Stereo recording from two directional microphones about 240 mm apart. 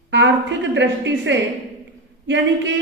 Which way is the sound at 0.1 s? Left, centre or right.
Right.